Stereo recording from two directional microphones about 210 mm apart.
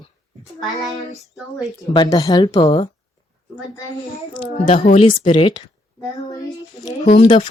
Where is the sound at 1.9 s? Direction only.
20° left (ahead or behind).